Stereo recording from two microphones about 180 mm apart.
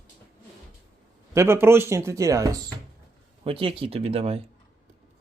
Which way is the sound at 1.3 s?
15° right (ahead or behind).